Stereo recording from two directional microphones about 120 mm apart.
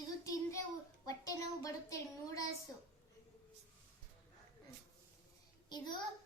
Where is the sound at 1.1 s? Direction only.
30° left (ahead or behind).